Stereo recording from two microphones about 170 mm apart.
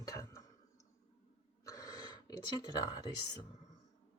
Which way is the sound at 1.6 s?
20° left (ahead or behind).